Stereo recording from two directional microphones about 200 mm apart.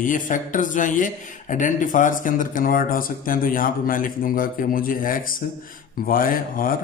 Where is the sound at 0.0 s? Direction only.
40° left (ahead or behind).